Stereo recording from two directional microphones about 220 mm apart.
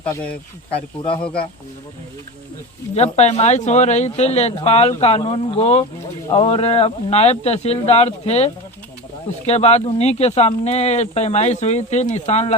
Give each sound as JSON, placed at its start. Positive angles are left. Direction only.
{"t": 0.0, "sound": "speech", "side_deg": 5}
{"t": 2.9, "sound": "speech", "side_deg": 30}
{"t": 9.5, "sound": "speech", "side_deg": 30}